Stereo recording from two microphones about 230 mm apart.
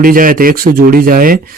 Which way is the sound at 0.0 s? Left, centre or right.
Right.